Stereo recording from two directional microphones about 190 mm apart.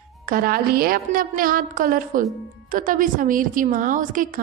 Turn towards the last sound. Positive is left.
turn(degrees=-45)  # may be behind; listen again after turning